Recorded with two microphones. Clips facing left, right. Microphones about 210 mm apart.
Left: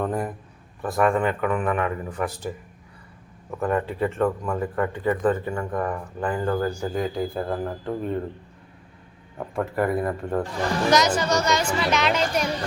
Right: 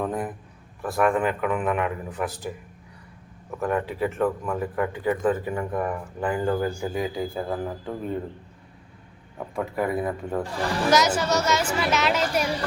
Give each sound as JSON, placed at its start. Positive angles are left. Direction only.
{"t": 0.0, "sound": "a sound", "side_deg": 0}
{"t": 0.8, "sound": "speech", "side_deg": 0}
{"t": 3.6, "sound": "speech", "side_deg": 0}
{"t": 9.4, "sound": "speech", "side_deg": 0}